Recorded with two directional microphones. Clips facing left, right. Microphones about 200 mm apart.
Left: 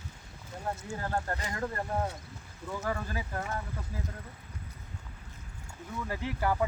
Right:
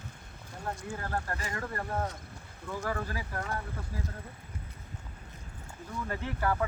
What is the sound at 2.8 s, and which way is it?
Speech, 20° left (ahead or behind).